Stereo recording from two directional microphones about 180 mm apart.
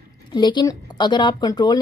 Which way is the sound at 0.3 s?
25° left (ahead or behind).